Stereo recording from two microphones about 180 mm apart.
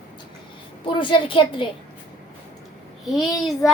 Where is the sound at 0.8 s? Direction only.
30° left (ahead or behind).